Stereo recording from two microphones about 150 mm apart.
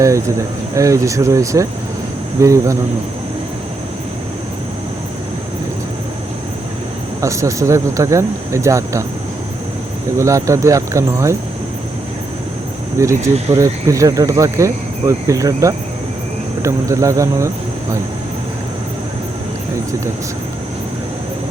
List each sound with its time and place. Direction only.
0.0 s speech: 20° right (ahead or behind)
7.2 s speech: 20° right (ahead or behind)
10.2 s speech: 20° right (ahead or behind)
13.0 s speech: 20° right (ahead or behind)